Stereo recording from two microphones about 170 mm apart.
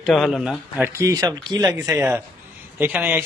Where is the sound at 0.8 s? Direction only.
20° right (ahead or behind).